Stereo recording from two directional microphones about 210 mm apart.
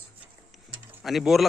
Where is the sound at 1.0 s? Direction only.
Centre (ahead or behind).